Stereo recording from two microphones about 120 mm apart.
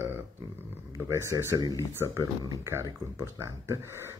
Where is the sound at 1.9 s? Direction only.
25° right (ahead or behind).